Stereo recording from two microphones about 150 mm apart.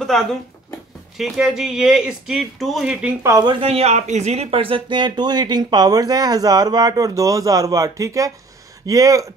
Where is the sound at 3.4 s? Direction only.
40° right (ahead or behind); by 9.3 s 20° right (ahead or behind).